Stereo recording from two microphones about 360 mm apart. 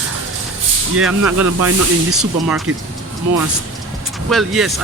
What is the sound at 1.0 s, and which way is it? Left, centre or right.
Speech, centre.